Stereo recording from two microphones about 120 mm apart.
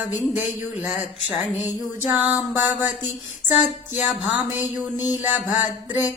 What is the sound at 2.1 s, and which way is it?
Music, 15° right (ahead or behind).